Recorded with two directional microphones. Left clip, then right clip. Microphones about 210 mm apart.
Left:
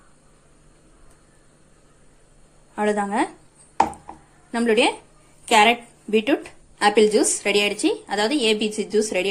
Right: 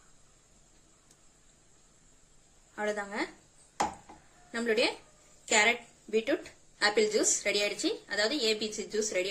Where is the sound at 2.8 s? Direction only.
25° left (ahead or behind).